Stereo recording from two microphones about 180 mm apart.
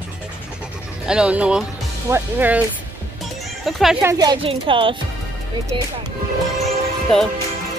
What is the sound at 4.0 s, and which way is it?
Speech, 20° right (ahead or behind).